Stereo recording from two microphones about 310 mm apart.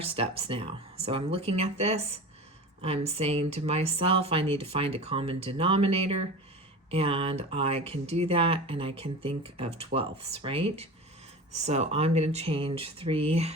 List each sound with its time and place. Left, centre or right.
0.2 s speech: centre